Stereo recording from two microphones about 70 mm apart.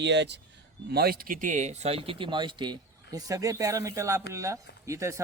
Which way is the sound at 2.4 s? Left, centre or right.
Right.